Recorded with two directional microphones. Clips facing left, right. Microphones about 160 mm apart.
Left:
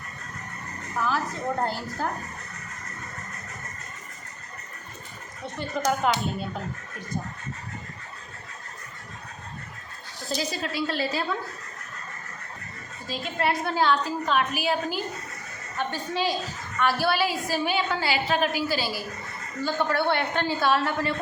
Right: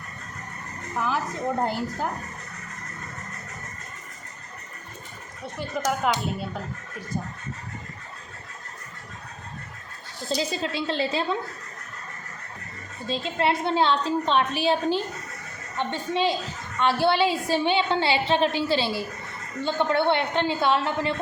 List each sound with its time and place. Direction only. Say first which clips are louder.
0.9 s a woman's voice: even; 20° right (ahead or behind)
5.5 s speech: left 1 dB; 5° right (ahead or behind)
10.2 s a woman's voice: right 3 dB; 25° right (ahead or behind)
13.1 s a woman's voice: right 3 dB; 25° right (ahead or behind)